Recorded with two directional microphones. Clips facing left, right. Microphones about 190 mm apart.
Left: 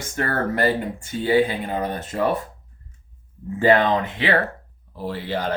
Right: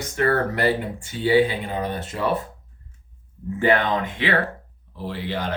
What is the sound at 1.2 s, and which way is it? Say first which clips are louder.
Speech: right 1 dB; 45° left (ahead or behind).